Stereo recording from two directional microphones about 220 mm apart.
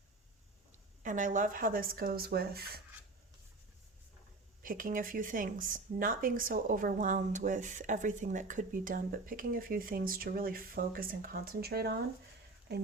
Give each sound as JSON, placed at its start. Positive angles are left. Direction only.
{"t": 1.0, "sound": "speech", "side_deg": -35}
{"t": 4.6, "sound": "speech", "side_deg": -40}